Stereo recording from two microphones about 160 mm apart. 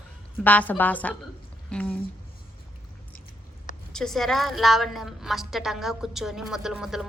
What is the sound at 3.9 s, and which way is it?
A woman's voice, centre (ahead or behind).